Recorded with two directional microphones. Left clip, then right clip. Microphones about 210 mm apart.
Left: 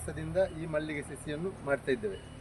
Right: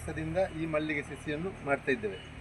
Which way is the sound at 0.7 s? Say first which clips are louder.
Right 2 dB; 15° left (ahead or behind).